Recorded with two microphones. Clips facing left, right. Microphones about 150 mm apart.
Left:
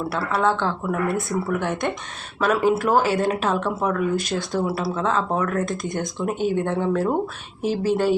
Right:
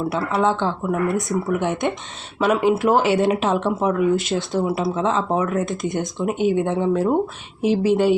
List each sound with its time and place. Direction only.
0.1 s speech: 20° right (ahead or behind)